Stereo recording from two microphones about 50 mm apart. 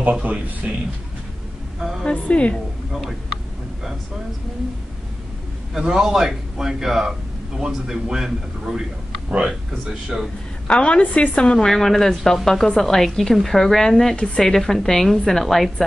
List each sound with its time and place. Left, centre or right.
0.2 s speech: right
1.8 s a woman's voice: centre
2.2 s a woman's voice: left
2.9 s a woman's voice: centre
5.8 s a man's voice: centre
10.1 s a man's voice: centre
10.7 s a woman's voice: left; by 15.7 s centre